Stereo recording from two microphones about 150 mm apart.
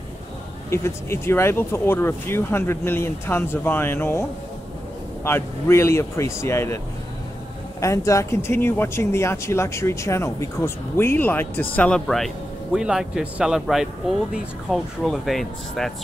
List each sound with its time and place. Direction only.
0.7 s speech: 15° left (ahead or behind)
7.8 s speech: 20° left (ahead or behind); by 15.9 s centre (ahead or behind)